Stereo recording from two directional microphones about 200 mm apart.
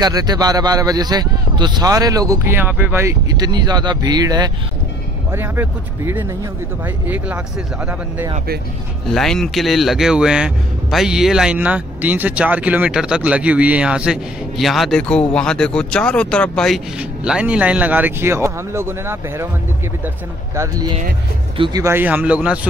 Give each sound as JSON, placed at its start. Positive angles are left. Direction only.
{"t": 0.0, "sound": "a man's voice", "side_deg": -20}
{"t": 9.0, "sound": "speech", "side_deg": 0}
{"t": 20.5, "sound": "a man's voice", "side_deg": -15}